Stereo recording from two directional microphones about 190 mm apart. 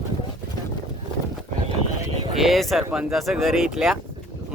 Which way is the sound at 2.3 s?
Centre (ahead or behind).